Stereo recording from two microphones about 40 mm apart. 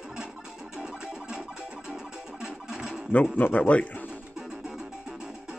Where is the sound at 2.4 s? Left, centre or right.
Centre.